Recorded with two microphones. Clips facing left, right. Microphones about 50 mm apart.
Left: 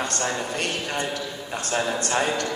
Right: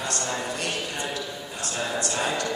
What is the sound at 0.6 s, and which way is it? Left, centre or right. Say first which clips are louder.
A man's voice: left 3 dB; left.